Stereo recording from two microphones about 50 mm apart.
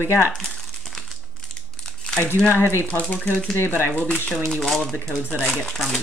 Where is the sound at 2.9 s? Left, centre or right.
Left.